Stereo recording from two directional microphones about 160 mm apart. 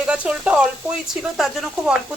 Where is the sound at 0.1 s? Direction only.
5° right (ahead or behind).